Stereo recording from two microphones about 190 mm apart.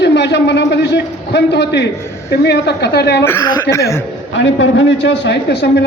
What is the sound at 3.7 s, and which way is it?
Speech, 15° left (ahead or behind).